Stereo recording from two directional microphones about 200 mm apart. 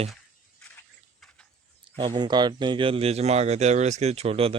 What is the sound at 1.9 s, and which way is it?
Speech, 25° right (ahead or behind).